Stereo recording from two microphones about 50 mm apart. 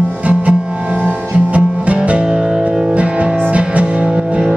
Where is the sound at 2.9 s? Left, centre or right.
Right.